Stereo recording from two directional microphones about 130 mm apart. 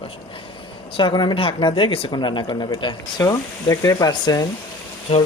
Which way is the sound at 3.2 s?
25° left (ahead or behind).